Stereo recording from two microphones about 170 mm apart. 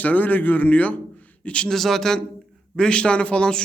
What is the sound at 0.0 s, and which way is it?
A man's voice, 10° left (ahead or behind).